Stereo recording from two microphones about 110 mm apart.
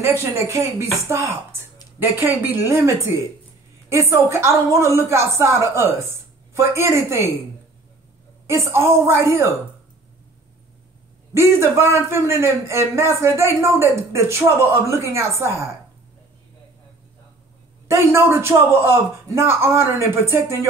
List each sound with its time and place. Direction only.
0.0 s a man's voice: 25° right (ahead or behind)
8.5 s a man's voice: 25° right (ahead or behind)
11.3 s a man's voice: 25° right (ahead or behind)
17.8 s a man's voice: 25° right (ahead or behind)